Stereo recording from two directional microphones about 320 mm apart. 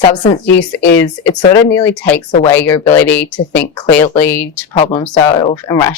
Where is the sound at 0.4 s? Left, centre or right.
Left.